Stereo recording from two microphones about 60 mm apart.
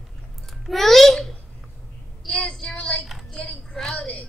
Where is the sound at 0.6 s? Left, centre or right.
Centre.